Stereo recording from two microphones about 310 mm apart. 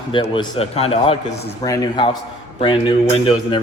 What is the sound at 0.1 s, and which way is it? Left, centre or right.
A man's voice, centre.